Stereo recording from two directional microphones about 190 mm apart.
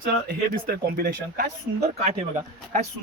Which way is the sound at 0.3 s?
50° right (ahead or behind).